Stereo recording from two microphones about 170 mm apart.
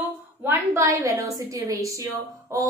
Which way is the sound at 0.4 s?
15° right (ahead or behind).